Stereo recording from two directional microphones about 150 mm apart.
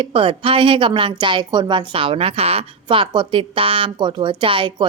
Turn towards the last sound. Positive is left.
turn(degrees=-35)  # may be behind; listen again after turning